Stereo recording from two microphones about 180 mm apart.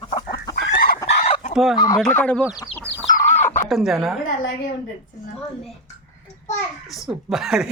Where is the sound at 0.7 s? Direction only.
55° left (ahead or behind).